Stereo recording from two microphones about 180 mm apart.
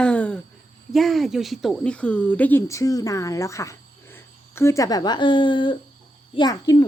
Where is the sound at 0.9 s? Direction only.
Centre (ahead or behind).